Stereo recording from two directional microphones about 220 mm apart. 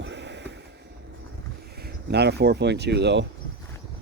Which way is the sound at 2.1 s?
50° right (ahead or behind).